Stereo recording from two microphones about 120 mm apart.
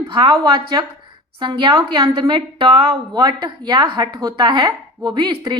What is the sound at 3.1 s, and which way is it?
A woman's voice, 35° right (ahead or behind).